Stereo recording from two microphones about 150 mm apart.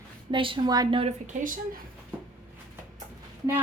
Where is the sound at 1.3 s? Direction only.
60° right (ahead or behind).